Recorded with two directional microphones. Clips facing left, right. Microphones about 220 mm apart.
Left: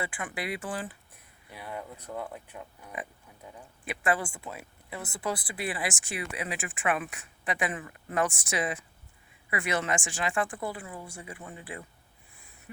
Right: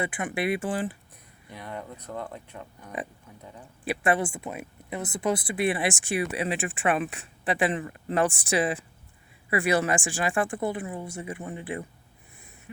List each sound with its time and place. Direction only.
0.0 s speech: 20° right (ahead or behind)
1.5 s speech: 5° left (ahead or behind)
3.8 s speech: 25° right (ahead or behind)